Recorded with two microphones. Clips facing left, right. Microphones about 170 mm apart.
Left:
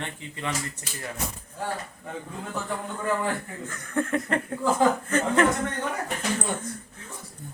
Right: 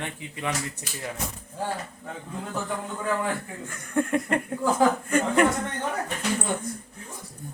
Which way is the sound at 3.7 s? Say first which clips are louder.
Right 2 dB; 15° right (ahead or behind).